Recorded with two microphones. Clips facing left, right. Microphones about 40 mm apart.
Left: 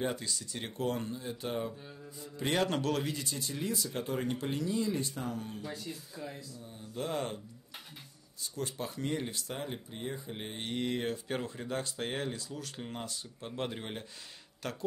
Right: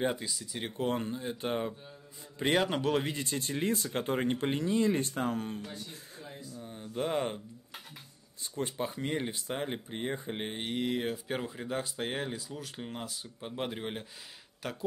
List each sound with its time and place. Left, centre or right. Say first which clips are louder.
0.0 s speech: right 3 dB; centre
0.7 s speech: right 2 dB; right
2.5 s speech: right 2 dB; centre; by 5.7 s right
6.6 s speech: right 5 dB; right
8.5 s speech: right 3 dB; right
10.6 s speech: right 1 dB; centre